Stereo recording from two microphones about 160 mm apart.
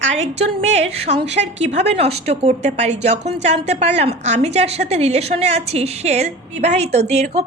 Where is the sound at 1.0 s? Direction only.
45° right (ahead or behind).